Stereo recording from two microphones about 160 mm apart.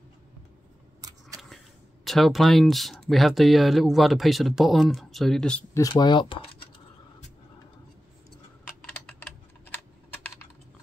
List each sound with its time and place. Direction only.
2.0 s speech: centre (ahead or behind)
5.8 s speech: 25° left (ahead or behind)
9.0 s typing: 10° left (ahead or behind)